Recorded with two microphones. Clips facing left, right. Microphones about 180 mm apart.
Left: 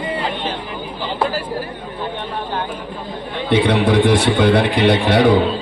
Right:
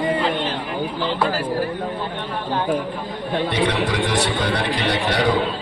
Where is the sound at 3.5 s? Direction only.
55° left (ahead or behind).